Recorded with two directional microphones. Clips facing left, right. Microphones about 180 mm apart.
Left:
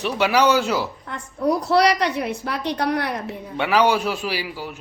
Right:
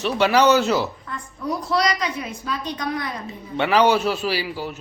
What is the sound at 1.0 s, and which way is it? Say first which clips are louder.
A woman's voice: left 6 dB; 65° left (ahead or behind).